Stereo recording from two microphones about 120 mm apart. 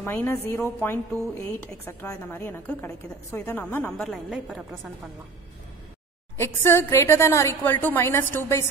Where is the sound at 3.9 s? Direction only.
Centre (ahead or behind).